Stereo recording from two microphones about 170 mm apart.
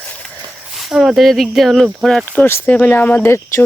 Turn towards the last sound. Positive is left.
turn(degrees=15)  # may be behind; listen again after turning